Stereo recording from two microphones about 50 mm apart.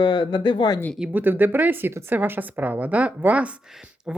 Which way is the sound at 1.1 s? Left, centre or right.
Right.